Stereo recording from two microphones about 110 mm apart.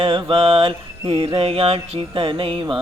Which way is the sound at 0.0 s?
55° right (ahead or behind).